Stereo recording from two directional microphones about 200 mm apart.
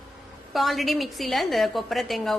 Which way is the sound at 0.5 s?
Centre (ahead or behind).